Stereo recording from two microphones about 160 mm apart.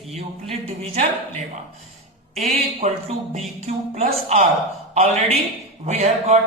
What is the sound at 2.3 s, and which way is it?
Speech, 45° right (ahead or behind).